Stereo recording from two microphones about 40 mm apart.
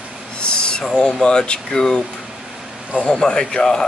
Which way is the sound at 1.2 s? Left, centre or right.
Centre.